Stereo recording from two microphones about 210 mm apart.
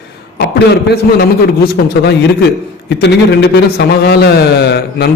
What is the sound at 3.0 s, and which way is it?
A man's voice, 55° left (ahead or behind).